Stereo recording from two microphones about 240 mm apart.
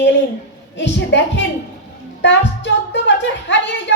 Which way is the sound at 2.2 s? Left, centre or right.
Left.